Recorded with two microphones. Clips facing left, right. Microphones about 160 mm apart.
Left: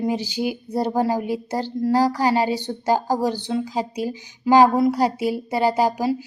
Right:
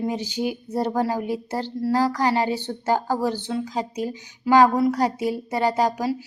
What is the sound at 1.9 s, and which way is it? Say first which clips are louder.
Speech: left 2 dB; 35° left (ahead or behind).